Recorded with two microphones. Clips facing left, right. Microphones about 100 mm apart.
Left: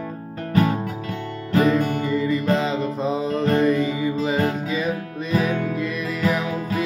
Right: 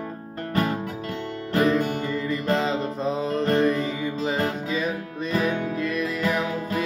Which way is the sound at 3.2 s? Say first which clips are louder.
Left 1 dB; 40° right (ahead or behind).